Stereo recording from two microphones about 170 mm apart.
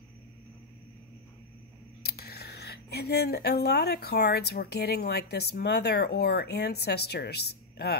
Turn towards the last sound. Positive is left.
turn(degrees=70)  # may be behind; listen again after turning